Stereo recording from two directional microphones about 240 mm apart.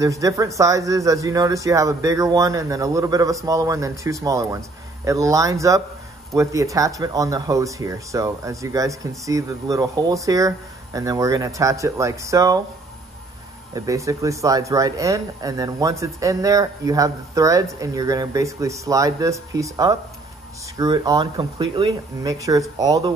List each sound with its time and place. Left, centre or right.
0.0 s speech: centre
13.7 s speech: centre